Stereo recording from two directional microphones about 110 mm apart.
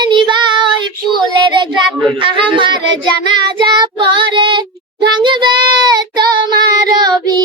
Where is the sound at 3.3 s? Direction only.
45° right (ahead or behind).